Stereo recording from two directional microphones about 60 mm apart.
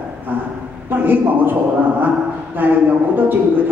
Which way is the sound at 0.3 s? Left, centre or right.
Right.